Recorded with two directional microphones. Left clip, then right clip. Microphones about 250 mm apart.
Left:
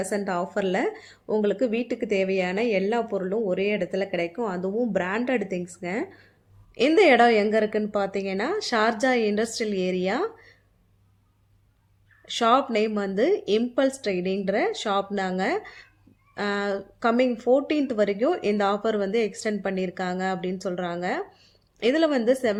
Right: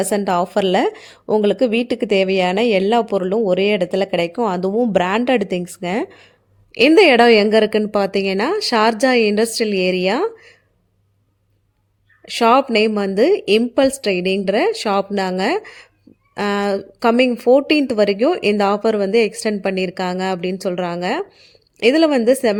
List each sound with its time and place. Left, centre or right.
0.0 s a woman's voice: right
12.3 s a woman's voice: right